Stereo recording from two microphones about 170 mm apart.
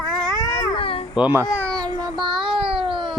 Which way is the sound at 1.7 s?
20° right (ahead or behind).